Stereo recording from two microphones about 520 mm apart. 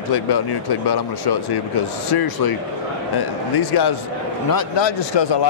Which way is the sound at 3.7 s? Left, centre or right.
Left.